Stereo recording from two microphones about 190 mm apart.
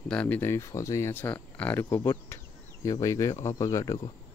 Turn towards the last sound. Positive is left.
turn(degrees=15)  # may be behind; listen again after turning